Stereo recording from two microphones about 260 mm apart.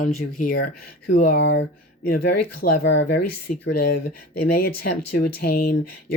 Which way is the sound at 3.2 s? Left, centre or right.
Left.